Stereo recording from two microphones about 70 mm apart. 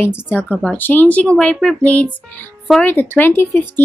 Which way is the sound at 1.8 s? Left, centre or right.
Left.